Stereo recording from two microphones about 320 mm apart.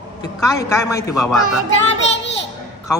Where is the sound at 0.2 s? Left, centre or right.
Centre.